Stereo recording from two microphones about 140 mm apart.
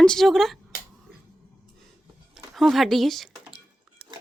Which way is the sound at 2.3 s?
Centre (ahead or behind).